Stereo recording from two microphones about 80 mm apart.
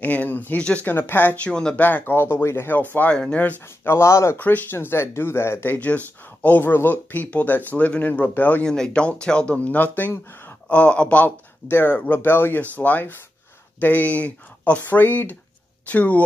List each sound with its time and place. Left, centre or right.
0.0 s speech: centre
1.8 s speech: left
4.4 s speech: left
8.6 s speech: centre